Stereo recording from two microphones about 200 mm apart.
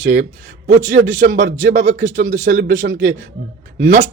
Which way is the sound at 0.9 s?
55° right (ahead or behind).